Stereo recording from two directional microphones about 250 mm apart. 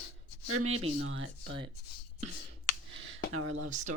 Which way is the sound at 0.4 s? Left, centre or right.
Right.